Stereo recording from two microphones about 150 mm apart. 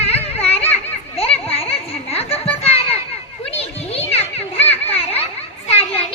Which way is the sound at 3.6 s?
40° left (ahead or behind).